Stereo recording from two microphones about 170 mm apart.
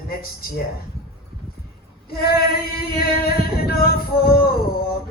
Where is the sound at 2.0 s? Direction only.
65° left (ahead or behind).